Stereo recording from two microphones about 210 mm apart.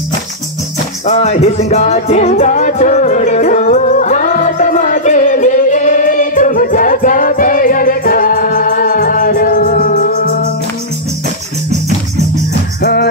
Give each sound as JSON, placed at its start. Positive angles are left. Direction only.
{"t": 1.0, "sound": "music", "side_deg": 30}
{"t": 12.8, "sound": "music", "side_deg": 50}